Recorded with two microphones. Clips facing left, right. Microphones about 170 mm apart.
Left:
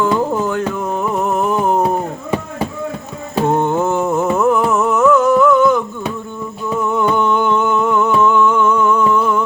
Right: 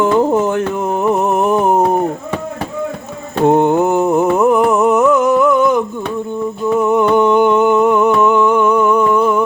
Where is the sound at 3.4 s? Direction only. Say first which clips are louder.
Right 5 dB; 20° right (ahead or behind).